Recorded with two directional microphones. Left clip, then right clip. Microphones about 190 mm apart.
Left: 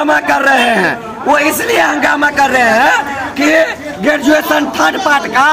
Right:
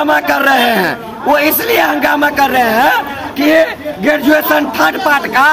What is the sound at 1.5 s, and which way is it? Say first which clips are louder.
Speech: even; 20° right (ahead or behind).